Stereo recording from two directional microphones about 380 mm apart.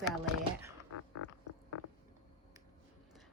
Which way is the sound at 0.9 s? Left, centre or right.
Left.